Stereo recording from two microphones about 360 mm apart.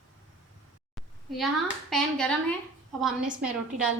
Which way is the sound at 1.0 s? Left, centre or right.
Centre.